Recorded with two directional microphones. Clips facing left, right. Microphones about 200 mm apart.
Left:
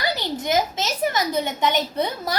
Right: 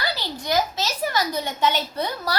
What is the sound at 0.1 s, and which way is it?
A woman's voice, 20° left (ahead or behind).